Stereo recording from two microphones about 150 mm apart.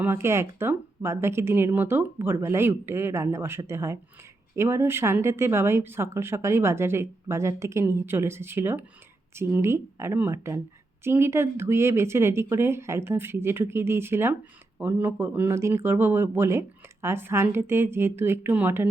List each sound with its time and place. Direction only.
0.0 s speech: 15° right (ahead or behind)